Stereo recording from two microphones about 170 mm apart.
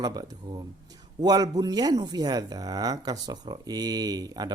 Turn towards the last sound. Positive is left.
turn(degrees=-25)  # may be behind; listen again after turning